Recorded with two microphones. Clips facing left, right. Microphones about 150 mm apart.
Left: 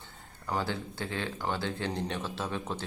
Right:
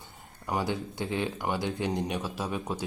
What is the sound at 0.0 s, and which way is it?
Speech, 15° right (ahead or behind).